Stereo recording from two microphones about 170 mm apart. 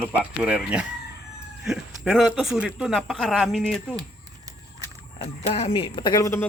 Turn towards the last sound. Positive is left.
turn(degrees=20)  # may be behind; listen again after turning